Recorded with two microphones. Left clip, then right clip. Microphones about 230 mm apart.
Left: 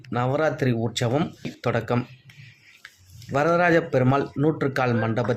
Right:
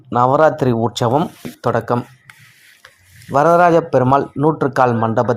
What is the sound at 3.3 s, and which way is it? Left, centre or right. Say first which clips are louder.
Speech: right 9 dB; centre.